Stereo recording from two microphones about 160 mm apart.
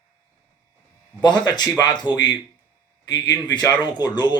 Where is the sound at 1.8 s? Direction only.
25° left (ahead or behind).